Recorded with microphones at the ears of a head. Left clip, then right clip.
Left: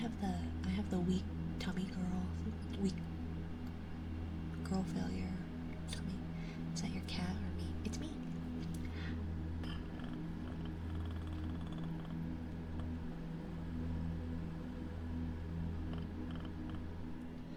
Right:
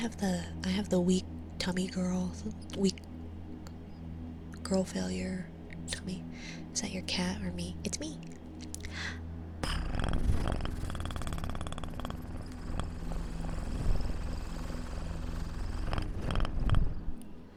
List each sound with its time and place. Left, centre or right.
0.0 s a woman's voice: right
4.7 s a woman's voice: right
6.7 s a woman's voice: right
9.6 s purr: right
15.9 s purr: right